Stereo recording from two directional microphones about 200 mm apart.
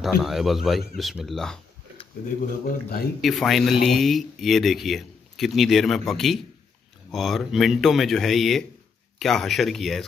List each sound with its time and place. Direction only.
0.0 s speech: centre (ahead or behind)
2.6 s a man's voice: 50° left (ahead or behind)
3.2 s speech: centre (ahead or behind)